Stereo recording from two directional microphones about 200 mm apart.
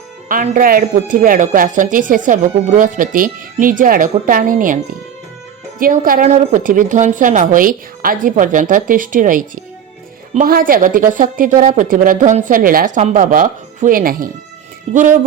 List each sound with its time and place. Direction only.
0.3 s speech: 45° right (ahead or behind)
5.8 s a woman's voice: 40° right (ahead or behind)